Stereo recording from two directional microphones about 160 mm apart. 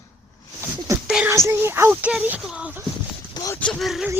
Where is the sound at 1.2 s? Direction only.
15° right (ahead or behind).